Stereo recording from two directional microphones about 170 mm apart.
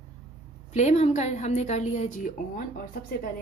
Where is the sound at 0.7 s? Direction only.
40° left (ahead or behind).